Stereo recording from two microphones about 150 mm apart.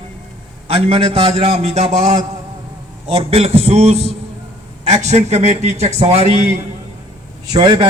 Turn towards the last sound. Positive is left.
turn(degrees=-30)  # may be behind; listen again after turning